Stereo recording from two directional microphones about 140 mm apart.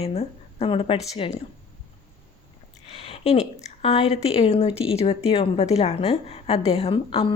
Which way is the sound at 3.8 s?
45° left (ahead or behind).